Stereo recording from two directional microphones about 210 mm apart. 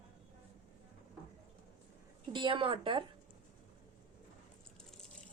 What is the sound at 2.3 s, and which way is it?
Speech, 25° right (ahead or behind).